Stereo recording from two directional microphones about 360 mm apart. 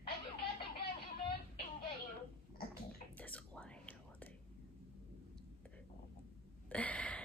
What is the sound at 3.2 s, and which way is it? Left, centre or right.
Whispering, centre.